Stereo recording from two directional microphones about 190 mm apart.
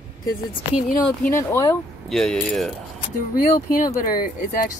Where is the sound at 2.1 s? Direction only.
5° left (ahead or behind).